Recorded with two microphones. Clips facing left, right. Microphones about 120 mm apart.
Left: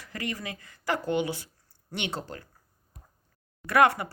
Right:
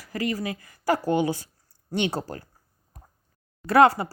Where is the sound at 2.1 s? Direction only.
35° right (ahead or behind).